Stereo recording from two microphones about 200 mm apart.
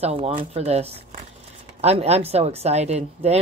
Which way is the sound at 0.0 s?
30° right (ahead or behind).